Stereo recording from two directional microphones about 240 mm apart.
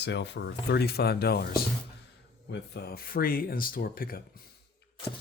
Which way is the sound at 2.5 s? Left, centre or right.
Left.